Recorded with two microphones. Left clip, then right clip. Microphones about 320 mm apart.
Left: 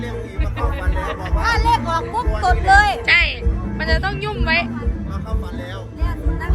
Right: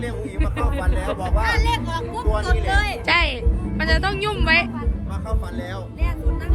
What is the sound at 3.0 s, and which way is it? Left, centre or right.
Music, centre.